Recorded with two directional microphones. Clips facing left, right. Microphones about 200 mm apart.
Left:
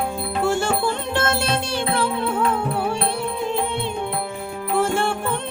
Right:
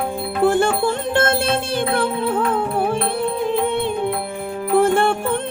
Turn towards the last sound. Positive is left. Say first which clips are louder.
# right 5 dB
turn(degrees=-55)  # may be behind; listen again after turning